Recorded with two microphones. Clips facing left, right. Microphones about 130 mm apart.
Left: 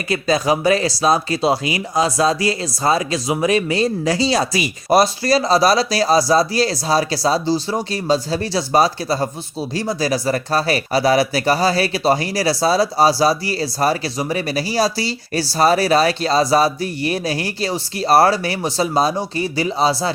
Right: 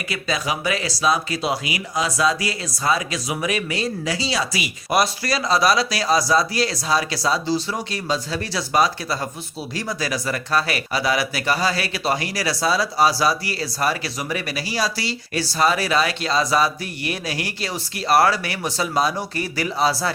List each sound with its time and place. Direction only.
0.1 s speech: 40° left (ahead or behind)